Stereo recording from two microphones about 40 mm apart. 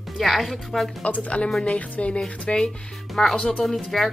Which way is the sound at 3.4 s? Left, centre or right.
Centre.